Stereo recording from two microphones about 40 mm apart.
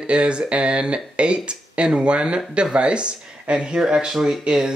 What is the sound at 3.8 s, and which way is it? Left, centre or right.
Speech, centre.